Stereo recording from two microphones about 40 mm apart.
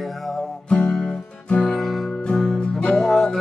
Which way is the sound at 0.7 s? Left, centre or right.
Left.